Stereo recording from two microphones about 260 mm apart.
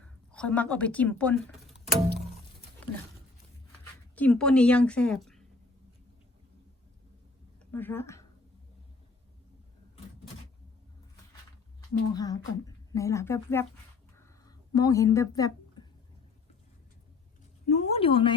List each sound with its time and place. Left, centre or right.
0.3 s speech: centre
4.1 s a woman's voice: centre
7.6 s a woman's voice: centre
12.1 s speech: centre
14.2 s a sound: centre
17.7 s speech: left